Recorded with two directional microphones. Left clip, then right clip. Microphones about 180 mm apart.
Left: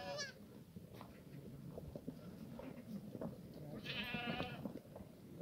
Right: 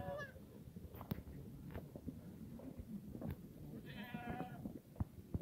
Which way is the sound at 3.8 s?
65° left (ahead or behind).